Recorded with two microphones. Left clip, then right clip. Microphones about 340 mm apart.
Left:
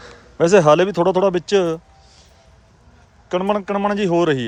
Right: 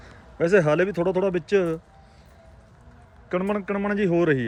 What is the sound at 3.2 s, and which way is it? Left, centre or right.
Speech, centre.